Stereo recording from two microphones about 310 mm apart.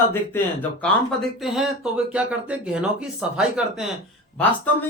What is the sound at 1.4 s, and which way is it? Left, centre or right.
Speech, centre.